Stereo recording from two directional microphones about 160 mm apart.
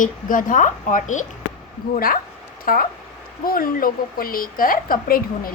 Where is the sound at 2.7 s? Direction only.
60° left (ahead or behind).